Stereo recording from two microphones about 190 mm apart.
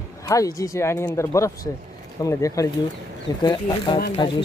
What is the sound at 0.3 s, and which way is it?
Speech, 20° left (ahead or behind).